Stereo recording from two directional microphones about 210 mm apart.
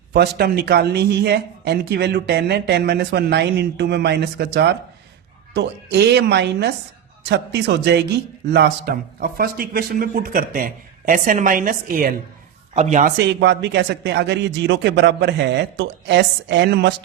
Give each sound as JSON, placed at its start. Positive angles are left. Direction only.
{"t": 0.1, "sound": "a man's voice", "side_deg": -50}
{"t": 13.2, "sound": "a man's voice", "side_deg": -55}